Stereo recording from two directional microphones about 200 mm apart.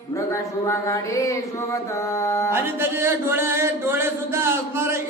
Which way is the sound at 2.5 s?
10° right (ahead or behind).